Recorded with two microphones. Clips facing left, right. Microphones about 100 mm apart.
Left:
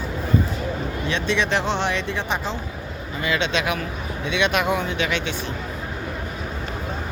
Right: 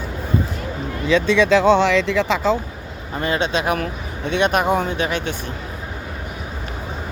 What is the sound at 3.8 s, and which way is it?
Speech, 50° right (ahead or behind).